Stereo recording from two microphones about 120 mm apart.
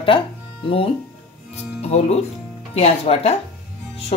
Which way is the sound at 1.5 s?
65° left (ahead or behind).